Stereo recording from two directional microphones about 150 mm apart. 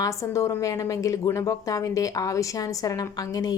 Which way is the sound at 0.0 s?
20° left (ahead or behind).